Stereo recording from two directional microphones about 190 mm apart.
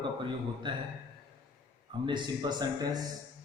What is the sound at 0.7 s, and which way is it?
Speech, 25° right (ahead or behind).